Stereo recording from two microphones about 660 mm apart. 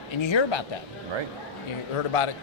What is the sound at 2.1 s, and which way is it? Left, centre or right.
Speech, left.